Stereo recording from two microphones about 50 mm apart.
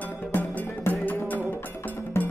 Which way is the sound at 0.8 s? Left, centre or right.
Left.